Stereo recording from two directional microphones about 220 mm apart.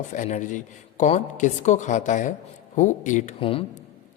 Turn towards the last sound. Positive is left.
turn(degrees=25)  # may be behind; listen again after turning